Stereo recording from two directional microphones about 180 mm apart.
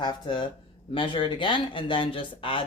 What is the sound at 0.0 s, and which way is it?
Speech, 25° left (ahead or behind).